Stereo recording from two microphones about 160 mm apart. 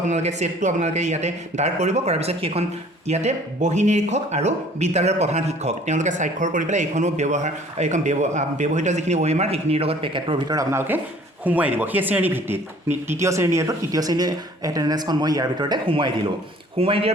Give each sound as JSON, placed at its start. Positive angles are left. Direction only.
{"t": 0.1, "sound": "a man's voice", "side_deg": -45}